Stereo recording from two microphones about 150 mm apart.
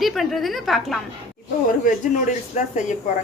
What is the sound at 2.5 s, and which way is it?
Speech, 55° left (ahead or behind).